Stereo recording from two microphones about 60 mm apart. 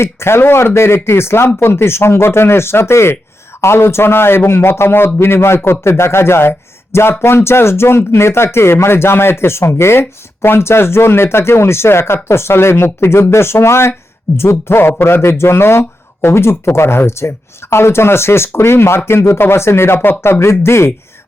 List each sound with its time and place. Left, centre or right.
0.0 s speech: left
20.4 s speech: left